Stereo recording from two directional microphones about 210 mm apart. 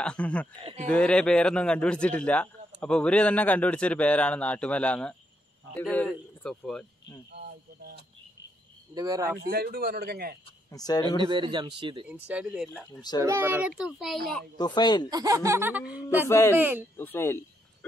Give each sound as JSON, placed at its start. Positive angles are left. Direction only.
{"t": 0.0, "sound": "a man's voice", "side_deg": 5}
{"t": 0.6, "sound": "speech", "side_deg": -25}
{"t": 0.8, "sound": "a man's voice", "side_deg": 5}
{"t": 7.3, "sound": "a man's voice", "side_deg": -45}
{"t": 8.9, "sound": "speech", "side_deg": -15}
{"t": 9.4, "sound": "a man's voice", "side_deg": -45}
{"t": 10.7, "sound": "speech", "side_deg": 20}
{"t": 11.2, "sound": "speech", "side_deg": -25}
{"t": 12.1, "sound": "a man's voice", "side_deg": -5}
{"t": 14.6, "sound": "speech", "side_deg": 20}
{"t": 15.0, "sound": "speech", "side_deg": -15}
{"t": 16.3, "sound": "speech", "side_deg": 15}
{"t": 16.5, "sound": "speech", "side_deg": -10}
{"t": 16.9, "sound": "speech", "side_deg": 10}